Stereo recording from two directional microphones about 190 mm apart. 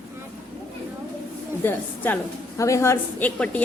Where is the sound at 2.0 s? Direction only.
10° left (ahead or behind).